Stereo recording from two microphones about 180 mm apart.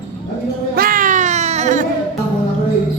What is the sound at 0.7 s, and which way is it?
Baby cry, 50° right (ahead or behind).